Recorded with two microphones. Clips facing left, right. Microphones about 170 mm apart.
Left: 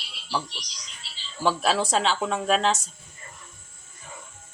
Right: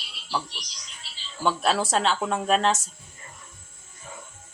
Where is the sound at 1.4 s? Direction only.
Centre (ahead or behind).